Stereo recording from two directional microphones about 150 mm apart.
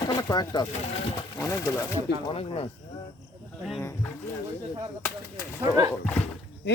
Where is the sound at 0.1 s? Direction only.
25° left (ahead or behind).